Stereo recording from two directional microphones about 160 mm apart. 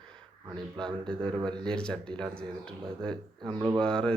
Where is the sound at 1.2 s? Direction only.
30° right (ahead or behind).